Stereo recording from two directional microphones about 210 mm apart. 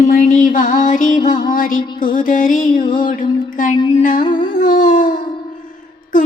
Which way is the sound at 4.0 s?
40° left (ahead or behind).